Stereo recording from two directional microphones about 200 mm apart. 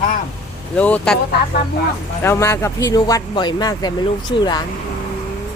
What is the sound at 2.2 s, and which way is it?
Speech, 15° left (ahead or behind).